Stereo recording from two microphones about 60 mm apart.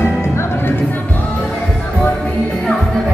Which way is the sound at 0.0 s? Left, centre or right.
Left.